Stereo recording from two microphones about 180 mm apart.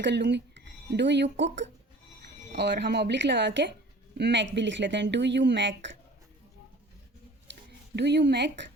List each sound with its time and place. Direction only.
0.0 s speech: 75° right (ahead or behind)
2.5 s speech: 70° right (ahead or behind)
7.9 s speech: 70° right (ahead or behind)